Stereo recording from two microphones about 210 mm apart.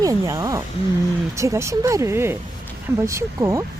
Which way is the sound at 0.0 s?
15° right (ahead or behind).